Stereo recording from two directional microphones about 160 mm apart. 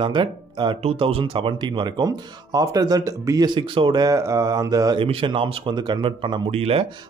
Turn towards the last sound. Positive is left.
turn(degrees=-40)  # may be behind; listen again after turning